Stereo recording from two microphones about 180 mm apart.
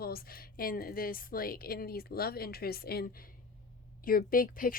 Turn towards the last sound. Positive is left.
turn(degrees=50)  # may be behind; listen again after turning